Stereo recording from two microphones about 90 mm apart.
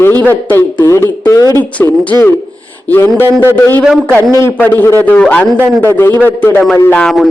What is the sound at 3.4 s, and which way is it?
Speech, 25° left (ahead or behind).